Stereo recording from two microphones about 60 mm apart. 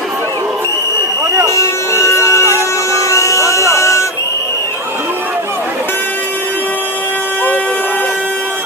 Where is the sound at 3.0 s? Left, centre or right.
Left.